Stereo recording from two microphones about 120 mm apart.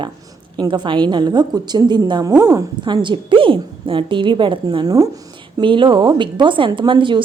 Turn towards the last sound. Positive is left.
turn(degrees=-45)  # may be behind; listen again after turning